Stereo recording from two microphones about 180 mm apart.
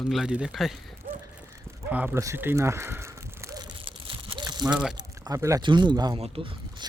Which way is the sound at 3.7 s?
30° right (ahead or behind).